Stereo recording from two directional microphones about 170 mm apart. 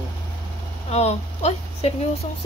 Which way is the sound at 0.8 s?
40° left (ahead or behind).